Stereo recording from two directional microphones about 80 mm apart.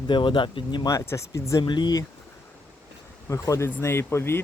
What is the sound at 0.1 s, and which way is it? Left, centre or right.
Speech, left.